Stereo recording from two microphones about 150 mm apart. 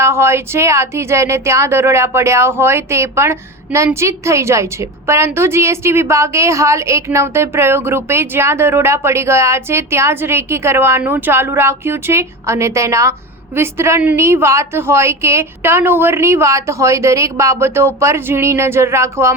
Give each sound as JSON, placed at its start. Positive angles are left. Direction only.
{"t": 0.0, "sound": "a woman's voice", "side_deg": -15}